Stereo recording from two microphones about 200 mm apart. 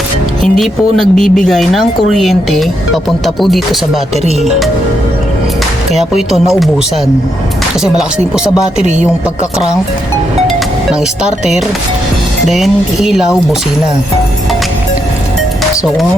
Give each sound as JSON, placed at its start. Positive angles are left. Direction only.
{"t": 0.4, "sound": "speech", "side_deg": 0}
{"t": 5.9, "sound": "speech", "side_deg": 0}
{"t": 8.8, "sound": "speech", "side_deg": -35}
{"t": 11.2, "sound": "speech", "side_deg": -5}